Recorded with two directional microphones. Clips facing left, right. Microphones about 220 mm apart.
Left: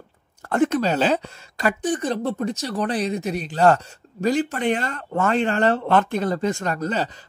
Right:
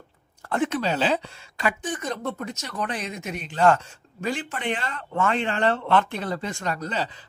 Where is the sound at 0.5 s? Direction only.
45° left (ahead or behind).